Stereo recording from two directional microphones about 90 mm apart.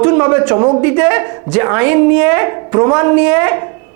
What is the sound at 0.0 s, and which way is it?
A man's voice, 20° right (ahead or behind).